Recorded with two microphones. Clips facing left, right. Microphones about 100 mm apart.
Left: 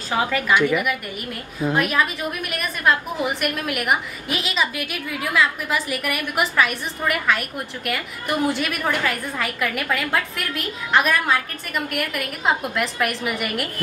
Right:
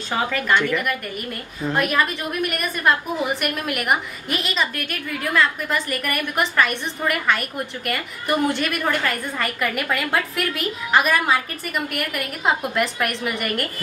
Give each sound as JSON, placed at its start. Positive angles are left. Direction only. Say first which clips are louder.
{"t": 0.1, "sound": "a woman's voice", "louder": "left 1 dB", "side_deg": 5}